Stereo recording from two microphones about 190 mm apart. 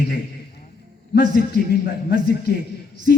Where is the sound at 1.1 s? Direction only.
60° left (ahead or behind).